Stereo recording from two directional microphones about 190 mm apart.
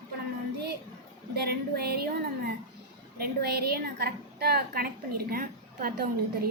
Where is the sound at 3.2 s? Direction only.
55° right (ahead or behind).